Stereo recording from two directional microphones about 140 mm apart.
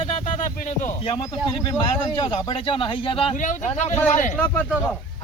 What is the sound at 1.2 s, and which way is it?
Speech, 30° left (ahead or behind).